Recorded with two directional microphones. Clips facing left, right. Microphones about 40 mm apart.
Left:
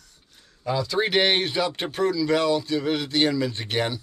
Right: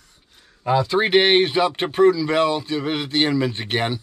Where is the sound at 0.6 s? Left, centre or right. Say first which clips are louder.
Right 5 dB; right.